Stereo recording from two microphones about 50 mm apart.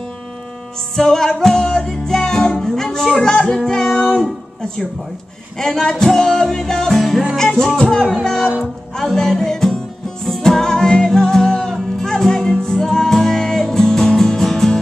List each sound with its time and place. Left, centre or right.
0.9 s music: centre
5.6 s music: centre
8.0 s music: centre